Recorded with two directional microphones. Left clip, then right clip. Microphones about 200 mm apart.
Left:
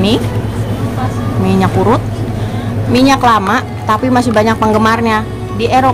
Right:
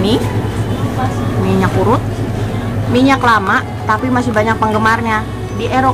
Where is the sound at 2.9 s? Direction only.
65° left (ahead or behind).